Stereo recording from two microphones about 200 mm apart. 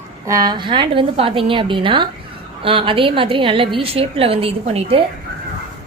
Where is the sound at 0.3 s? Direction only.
20° right (ahead or behind).